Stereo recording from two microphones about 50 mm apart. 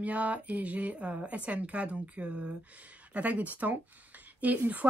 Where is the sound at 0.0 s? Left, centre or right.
Right.